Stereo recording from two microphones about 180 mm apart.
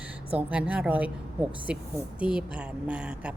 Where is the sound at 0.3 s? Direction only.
5° right (ahead or behind).